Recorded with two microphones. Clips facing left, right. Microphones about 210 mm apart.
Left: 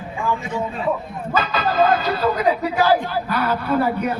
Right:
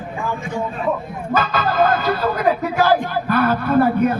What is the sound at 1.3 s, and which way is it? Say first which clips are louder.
Speech: right 1 dB; 50° right (ahead or behind).